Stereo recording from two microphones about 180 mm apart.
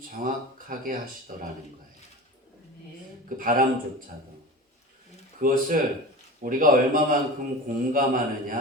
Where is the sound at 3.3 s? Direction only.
50° right (ahead or behind).